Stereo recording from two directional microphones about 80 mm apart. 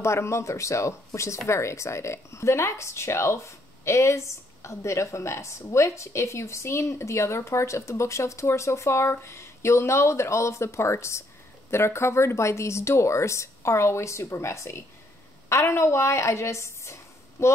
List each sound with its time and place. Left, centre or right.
0.0 s a woman's voice: left